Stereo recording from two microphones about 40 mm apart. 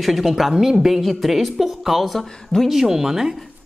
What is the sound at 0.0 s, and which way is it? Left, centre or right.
A woman's voice, centre.